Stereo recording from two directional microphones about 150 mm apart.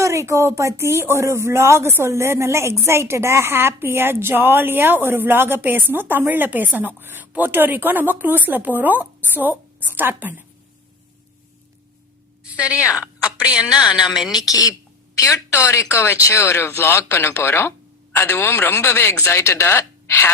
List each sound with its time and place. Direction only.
0.0 s speech: 20° right (ahead or behind)
12.5 s speech: 5° right (ahead or behind)
14.4 s a woman's voice: 25° left (ahead or behind)